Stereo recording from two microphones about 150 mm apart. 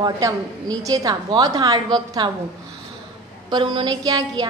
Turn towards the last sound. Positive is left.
turn(degrees=-25)  # may be behind; listen again after turning